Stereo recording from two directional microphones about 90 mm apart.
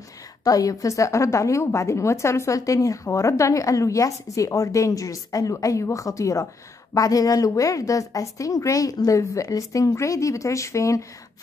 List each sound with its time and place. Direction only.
0.4 s a woman's voice: 40° left (ahead or behind)